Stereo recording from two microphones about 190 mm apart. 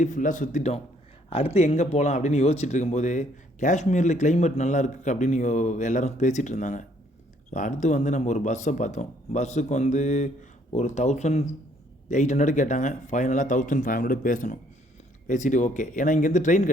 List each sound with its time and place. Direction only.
0.0 s speech: 40° left (ahead or behind)